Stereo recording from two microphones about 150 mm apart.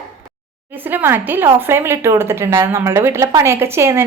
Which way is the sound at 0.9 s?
15° right (ahead or behind).